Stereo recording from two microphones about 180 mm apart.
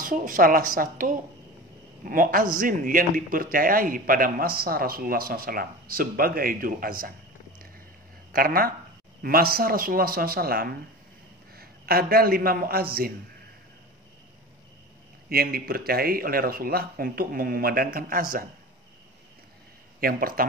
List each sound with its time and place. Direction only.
0.0 s a man's voice: 50° right (ahead or behind)
8.3 s a man's voice: 55° right (ahead or behind)
15.2 s speech: 55° right (ahead or behind)
20.0 s a man's voice: 55° right (ahead or behind)